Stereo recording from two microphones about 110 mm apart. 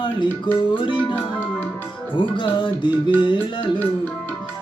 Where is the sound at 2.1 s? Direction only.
50° left (ahead or behind).